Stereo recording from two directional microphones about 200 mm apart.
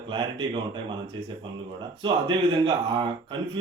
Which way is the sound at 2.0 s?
25° right (ahead or behind).